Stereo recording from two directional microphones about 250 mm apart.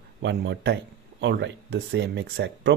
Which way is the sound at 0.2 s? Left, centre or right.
Right.